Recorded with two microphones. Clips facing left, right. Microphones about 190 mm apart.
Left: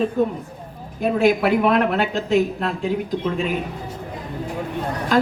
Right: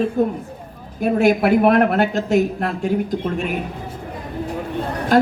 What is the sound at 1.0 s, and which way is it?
Speech, 50° right (ahead or behind).